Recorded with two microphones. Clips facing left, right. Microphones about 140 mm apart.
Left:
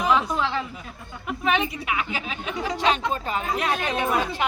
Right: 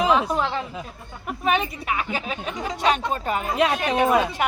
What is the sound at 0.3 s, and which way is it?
Speech, 35° right (ahead or behind).